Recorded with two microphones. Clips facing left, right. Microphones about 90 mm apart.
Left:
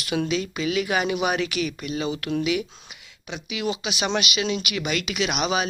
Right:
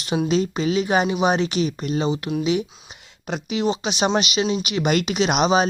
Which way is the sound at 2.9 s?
40° right (ahead or behind).